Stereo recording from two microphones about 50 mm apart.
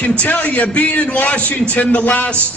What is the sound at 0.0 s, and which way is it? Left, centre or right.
A man's voice, left.